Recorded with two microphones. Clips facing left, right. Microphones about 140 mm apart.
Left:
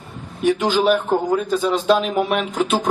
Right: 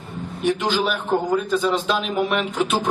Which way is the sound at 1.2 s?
Centre (ahead or behind).